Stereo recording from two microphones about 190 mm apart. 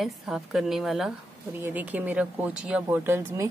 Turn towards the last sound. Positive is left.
turn(degrees=-10)  # may be behind; listen again after turning